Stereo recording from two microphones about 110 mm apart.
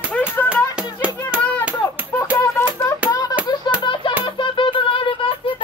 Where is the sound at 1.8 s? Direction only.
25° left (ahead or behind).